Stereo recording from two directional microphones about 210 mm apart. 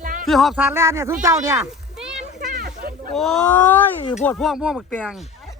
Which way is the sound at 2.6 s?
45° right (ahead or behind).